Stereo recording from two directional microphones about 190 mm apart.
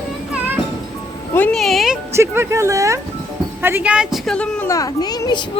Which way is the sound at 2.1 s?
15° right (ahead or behind).